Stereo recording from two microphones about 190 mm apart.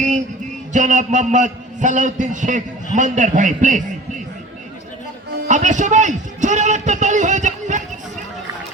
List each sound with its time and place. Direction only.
0.7 s a man's voice: 40° right (ahead or behind)
5.5 s a man's voice: 40° right (ahead or behind)